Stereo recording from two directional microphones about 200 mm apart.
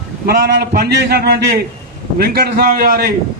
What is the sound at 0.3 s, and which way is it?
A man's voice, 50° right (ahead or behind).